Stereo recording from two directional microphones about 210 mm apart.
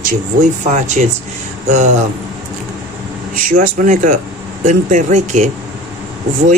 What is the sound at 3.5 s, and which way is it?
Speech, 40° right (ahead or behind).